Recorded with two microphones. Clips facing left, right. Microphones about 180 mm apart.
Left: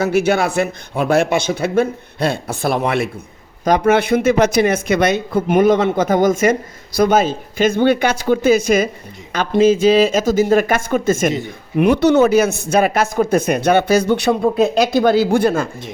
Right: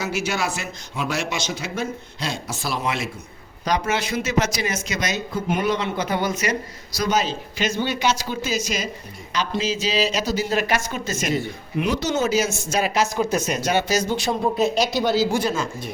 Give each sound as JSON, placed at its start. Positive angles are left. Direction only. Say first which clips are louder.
{"t": 0.0, "sound": "speech", "louder": "left 10 dB", "side_deg": 55}